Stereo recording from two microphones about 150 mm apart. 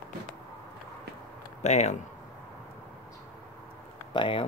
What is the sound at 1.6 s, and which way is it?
Speech, 50° left (ahead or behind).